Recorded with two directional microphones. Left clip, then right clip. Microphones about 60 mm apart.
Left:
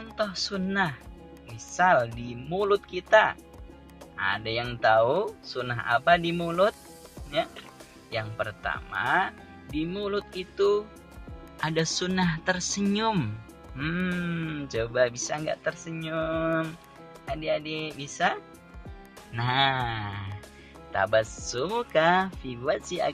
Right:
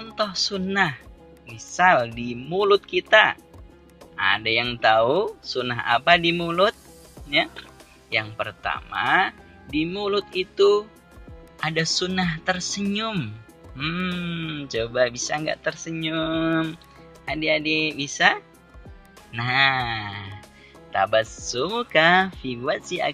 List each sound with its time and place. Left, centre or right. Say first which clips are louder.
0.1 s speech: right 5 dB; centre
6.3 s music: right 5 dB; right
8.1 s speech: right 6 dB; centre
9.8 s speech: right 6 dB; centre
11.6 s speech: right 4 dB; centre
12.8 s speech: left 3 dB; left; by 15.3 s centre
15.3 s speech: right 4 dB; centre
16.0 s music: right 4 dB; right
17.3 s speech: right 7 dB; centre
19.3 s speech: right 5 dB; centre